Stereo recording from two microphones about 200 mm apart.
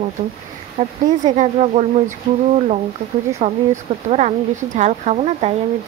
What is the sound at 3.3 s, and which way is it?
A woman's voice, 35° right (ahead or behind).